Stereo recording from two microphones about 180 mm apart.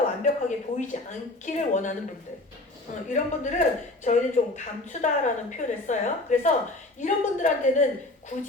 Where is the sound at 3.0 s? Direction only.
45° left (ahead or behind).